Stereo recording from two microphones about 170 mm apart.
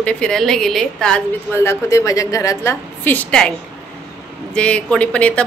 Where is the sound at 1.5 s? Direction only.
15° left (ahead or behind).